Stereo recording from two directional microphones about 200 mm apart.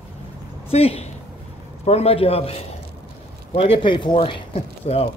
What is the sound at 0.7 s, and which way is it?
Speech, 30° left (ahead or behind).